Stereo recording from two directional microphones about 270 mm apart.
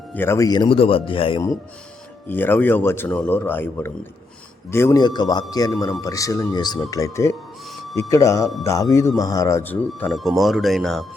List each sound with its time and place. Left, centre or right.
0.1 s speech: centre